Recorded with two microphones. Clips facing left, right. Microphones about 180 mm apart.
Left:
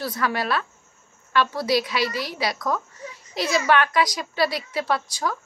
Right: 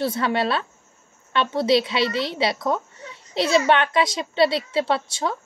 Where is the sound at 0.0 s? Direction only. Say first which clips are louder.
Right 4 dB; 25° right (ahead or behind).